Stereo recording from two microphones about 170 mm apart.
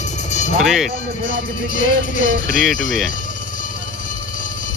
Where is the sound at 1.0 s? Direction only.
50° left (ahead or behind).